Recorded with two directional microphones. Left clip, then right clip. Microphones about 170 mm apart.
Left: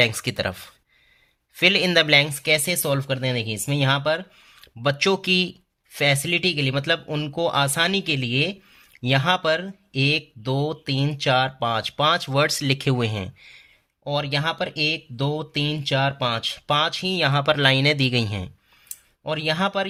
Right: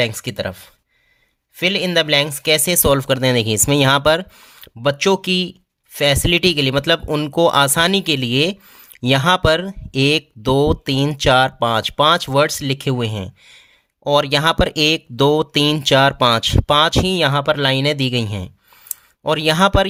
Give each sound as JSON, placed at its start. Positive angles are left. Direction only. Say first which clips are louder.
{"t": 0.0, "sound": "speech", "louder": "right 1 dB", "side_deg": -20}
{"t": 6.2, "sound": "speech", "louder": "right 7 dB", "side_deg": -40}
{"t": 14.0, "sound": "speech", "louder": "right 10 dB", "side_deg": -45}
{"t": 18.9, "sound": "speech", "louder": "right 9 dB", "side_deg": -45}